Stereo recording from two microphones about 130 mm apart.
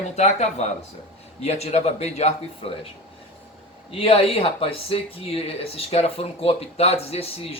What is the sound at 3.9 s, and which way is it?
Speech, 45° left (ahead or behind).